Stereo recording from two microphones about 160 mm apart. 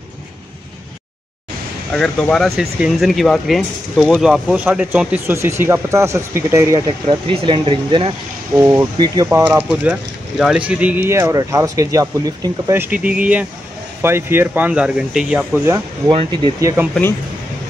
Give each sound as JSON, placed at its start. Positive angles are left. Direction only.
{"t": 1.9, "sound": "speech", "side_deg": 5}
{"t": 7.1, "sound": "speech", "side_deg": -35}
{"t": 8.5, "sound": "speech", "side_deg": -15}
{"t": 8.9, "sound": "speech", "side_deg": -25}
{"t": 9.5, "sound": "speech", "side_deg": -5}
{"t": 15.6, "sound": "speech", "side_deg": -20}
{"t": 16.5, "sound": "speech", "side_deg": -15}